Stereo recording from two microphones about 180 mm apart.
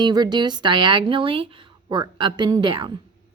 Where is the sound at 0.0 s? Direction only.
25° right (ahead or behind).